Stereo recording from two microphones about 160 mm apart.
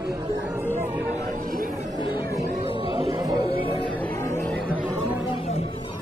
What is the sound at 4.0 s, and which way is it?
Music, 10° left (ahead or behind).